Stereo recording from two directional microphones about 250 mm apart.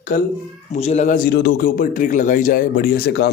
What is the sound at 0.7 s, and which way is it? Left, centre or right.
Speech, left.